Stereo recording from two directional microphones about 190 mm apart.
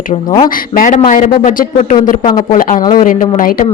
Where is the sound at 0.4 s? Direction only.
45° left (ahead or behind).